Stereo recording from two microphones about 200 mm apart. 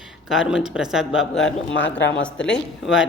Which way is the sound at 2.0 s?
65° left (ahead or behind).